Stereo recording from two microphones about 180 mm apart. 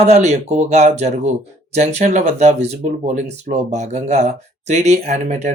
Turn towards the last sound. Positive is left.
turn(degrees=-40)  # may be behind; listen again after turning